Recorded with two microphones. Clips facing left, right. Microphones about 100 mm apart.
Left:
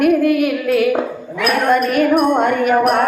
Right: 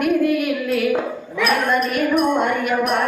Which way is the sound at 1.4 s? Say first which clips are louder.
Left 4 dB; 50° left (ahead or behind).